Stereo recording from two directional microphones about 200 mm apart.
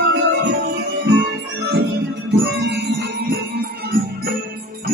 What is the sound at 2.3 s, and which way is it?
Music, 55° right (ahead or behind).